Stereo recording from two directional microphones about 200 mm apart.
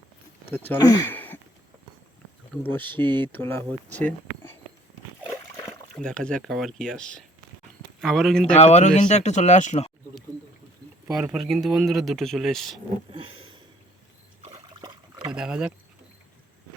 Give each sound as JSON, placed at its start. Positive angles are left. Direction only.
{"t": 0.4, "sound": "speech", "side_deg": 10}
{"t": 2.6, "sound": "speech", "side_deg": 10}
{"t": 3.0, "sound": "speech", "side_deg": -25}
{"t": 3.3, "sound": "speech", "side_deg": 10}
{"t": 3.9, "sound": "a sound", "side_deg": 10}
{"t": 6.0, "sound": "speech", "side_deg": 5}
{"t": 8.5, "sound": "speech", "side_deg": 35}
{"t": 11.1, "sound": "speech", "side_deg": -5}
{"t": 13.2, "sound": "a sound", "side_deg": -25}
{"t": 14.4, "sound": "trickle", "side_deg": -25}
{"t": 15.3, "sound": "speech", "side_deg": -5}